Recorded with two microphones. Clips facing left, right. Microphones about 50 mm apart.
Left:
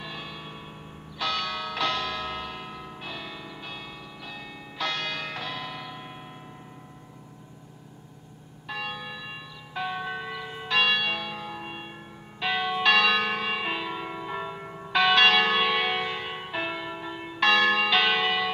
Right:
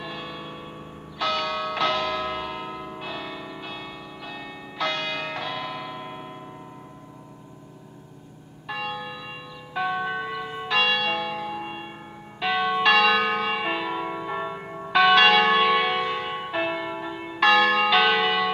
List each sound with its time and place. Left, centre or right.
0.0 s change ringing: centre
1.2 s church bell: centre
5.9 s church bell: centre
8.6 s church bell: centre